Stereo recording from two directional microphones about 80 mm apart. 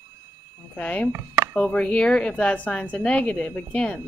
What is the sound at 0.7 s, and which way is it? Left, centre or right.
A woman's voice, centre.